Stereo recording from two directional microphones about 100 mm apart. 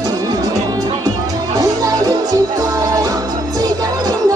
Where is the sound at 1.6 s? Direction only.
40° right (ahead or behind).